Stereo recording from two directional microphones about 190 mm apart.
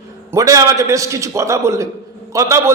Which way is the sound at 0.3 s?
15° right (ahead or behind).